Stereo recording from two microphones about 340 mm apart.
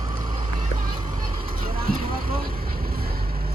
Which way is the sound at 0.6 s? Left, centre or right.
Right.